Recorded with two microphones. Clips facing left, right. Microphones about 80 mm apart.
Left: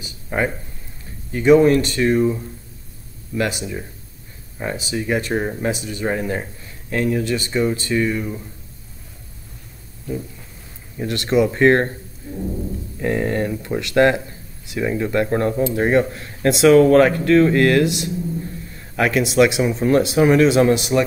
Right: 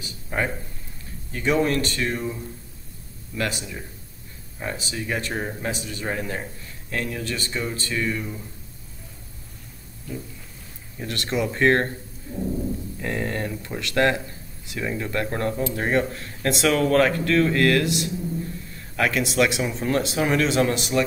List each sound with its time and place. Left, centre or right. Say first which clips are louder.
0.3 s speech: left 5 dB; left
3.3 s speech: left 6 dB; centre
11.0 s speech: left 8 dB; centre